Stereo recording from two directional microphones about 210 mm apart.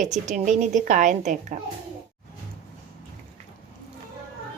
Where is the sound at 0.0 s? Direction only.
35° right (ahead or behind).